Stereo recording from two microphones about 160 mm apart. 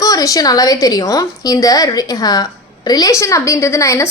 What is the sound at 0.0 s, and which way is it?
A woman's voice, 20° left (ahead or behind).